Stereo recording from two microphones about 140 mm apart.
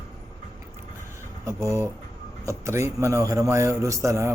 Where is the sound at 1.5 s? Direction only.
20° right (ahead or behind).